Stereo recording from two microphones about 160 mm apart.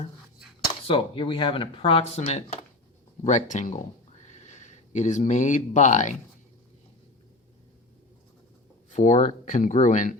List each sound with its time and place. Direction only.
0.7 s speech: 35° left (ahead or behind)
8.9 s speech: 45° left (ahead or behind)